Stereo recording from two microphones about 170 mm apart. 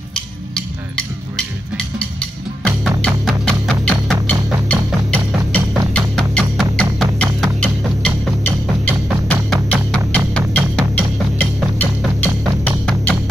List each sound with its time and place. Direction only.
3.0 s music: 5° left (ahead or behind)